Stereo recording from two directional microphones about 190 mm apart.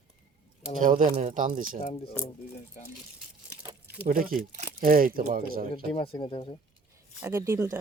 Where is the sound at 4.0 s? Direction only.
50° right (ahead or behind).